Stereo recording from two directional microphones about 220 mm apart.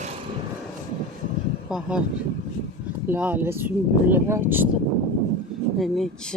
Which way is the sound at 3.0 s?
10° right (ahead or behind).